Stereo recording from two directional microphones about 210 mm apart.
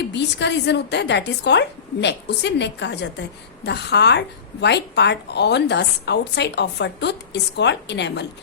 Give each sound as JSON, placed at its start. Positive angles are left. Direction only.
{"t": 0.1, "sound": "a woman's voice", "side_deg": 55}